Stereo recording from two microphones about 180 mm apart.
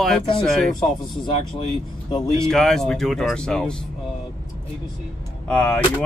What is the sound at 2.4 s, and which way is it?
Speech, centre (ahead or behind).